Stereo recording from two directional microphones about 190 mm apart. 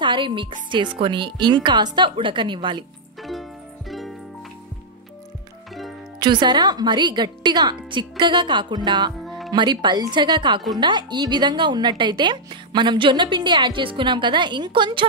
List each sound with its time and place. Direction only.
0.0 s a woman's voice: 25° right (ahead or behind)
3.2 s music: centre (ahead or behind)
6.1 s a woman's voice: 25° right (ahead or behind)